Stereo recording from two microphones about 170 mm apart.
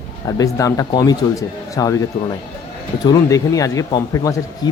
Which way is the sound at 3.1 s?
20° left (ahead or behind).